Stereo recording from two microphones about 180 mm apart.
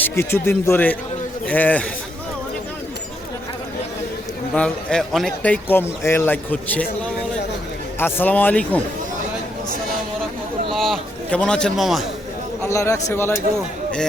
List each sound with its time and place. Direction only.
0.0 s a man's voice: 15° left (ahead or behind)
4.5 s a man's voice: 5° left (ahead or behind)
10.8 s a sound: centre (ahead or behind)
12.6 s a man's voice: 15° left (ahead or behind)